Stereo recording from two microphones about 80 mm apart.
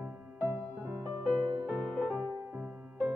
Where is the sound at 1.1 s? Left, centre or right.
Right.